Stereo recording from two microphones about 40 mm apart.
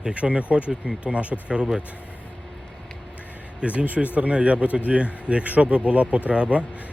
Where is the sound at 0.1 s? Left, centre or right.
Right.